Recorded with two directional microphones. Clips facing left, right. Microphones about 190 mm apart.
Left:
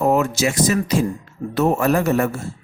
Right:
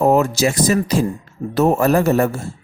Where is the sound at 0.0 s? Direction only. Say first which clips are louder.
Right 3 dB; 35° right (ahead or behind).